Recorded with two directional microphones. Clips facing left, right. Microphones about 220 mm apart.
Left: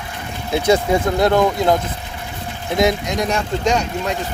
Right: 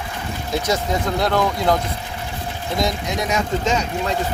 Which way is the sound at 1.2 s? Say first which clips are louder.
Left 4 dB; 25° left (ahead or behind).